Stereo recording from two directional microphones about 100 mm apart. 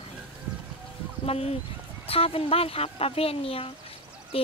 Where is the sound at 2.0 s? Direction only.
75° left (ahead or behind).